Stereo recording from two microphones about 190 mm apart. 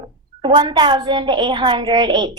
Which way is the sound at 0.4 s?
25° right (ahead or behind).